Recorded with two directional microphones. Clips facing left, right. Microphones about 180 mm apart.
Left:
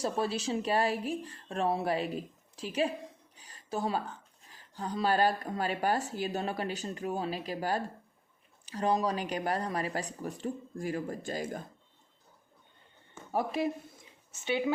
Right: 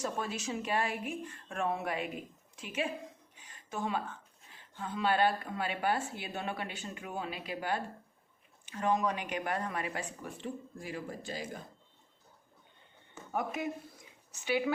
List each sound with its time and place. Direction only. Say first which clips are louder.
0.0 s speech: left 5 dB; 30° left (ahead or behind)
3.3 s a sound: left 5 dB; 35° left (ahead or behind)
4.4 s speech: left 4 dB; 40° left (ahead or behind)
13.3 s speech: left 4 dB; 30° left (ahead or behind)